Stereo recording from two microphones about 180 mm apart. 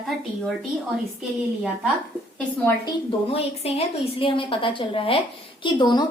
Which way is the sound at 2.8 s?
30° left (ahead or behind).